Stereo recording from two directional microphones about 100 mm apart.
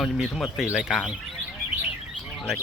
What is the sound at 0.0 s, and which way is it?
Speech, centre (ahead or behind).